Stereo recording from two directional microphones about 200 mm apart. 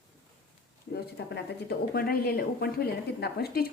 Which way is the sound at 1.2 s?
60° left (ahead or behind).